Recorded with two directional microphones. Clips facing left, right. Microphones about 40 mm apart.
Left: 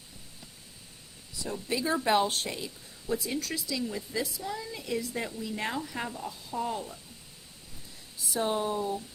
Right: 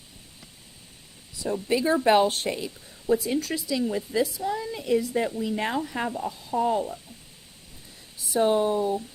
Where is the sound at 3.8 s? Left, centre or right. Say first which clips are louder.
Right 8 dB; right.